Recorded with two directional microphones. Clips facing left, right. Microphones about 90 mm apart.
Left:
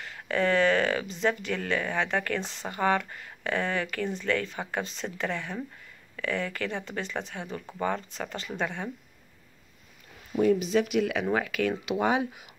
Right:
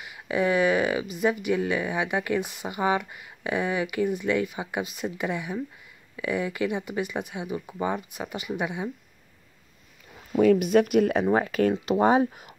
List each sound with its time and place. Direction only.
0.0 s speech: 15° right (ahead or behind)
10.5 s speech: 55° right (ahead or behind)